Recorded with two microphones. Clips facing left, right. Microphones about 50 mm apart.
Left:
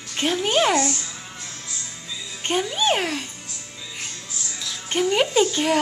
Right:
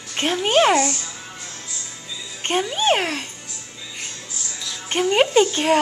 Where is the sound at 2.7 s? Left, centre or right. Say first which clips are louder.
Right 3 dB; right.